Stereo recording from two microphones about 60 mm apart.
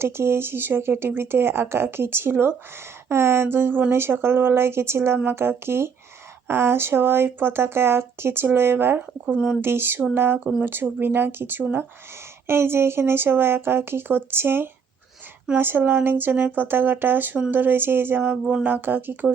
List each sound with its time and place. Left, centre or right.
0.0 s speech: right
12.5 s speech: right